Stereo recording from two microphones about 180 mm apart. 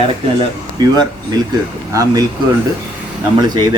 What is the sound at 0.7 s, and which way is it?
A man's voice, 20° right (ahead or behind).